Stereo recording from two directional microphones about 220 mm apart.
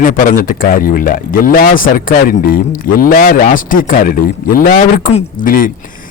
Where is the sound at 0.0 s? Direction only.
40° left (ahead or behind).